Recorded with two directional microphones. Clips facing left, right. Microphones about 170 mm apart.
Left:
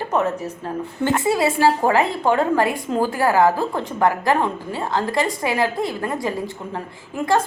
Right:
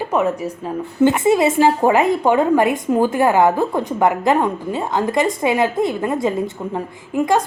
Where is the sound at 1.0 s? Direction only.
20° right (ahead or behind).